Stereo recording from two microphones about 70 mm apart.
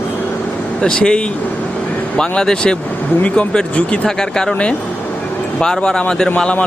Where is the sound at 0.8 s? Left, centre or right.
Centre.